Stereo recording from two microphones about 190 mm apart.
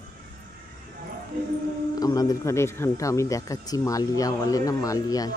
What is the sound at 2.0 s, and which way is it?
Speech, 20° left (ahead or behind).